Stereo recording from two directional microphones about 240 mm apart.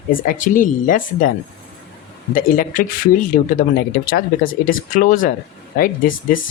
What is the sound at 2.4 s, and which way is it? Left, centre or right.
Speech, left.